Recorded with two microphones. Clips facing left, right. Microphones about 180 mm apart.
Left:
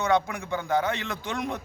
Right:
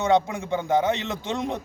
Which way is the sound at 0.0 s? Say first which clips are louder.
Right 3 dB; 25° right (ahead or behind).